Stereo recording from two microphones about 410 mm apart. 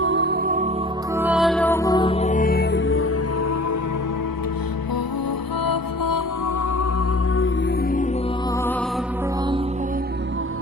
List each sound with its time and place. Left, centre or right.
0.0 s music: right
1.1 s music: centre; by 3.1 s left
5.6 s music: left